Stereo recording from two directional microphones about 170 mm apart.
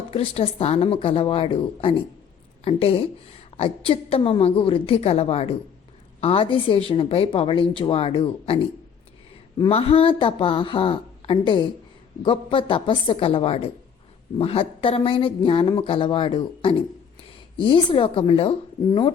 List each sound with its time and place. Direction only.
0.1 s a woman's voice: 35° left (ahead or behind)
9.6 s a woman's voice: 35° left (ahead or behind)